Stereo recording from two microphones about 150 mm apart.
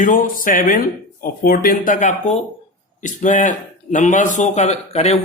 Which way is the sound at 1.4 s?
80° left.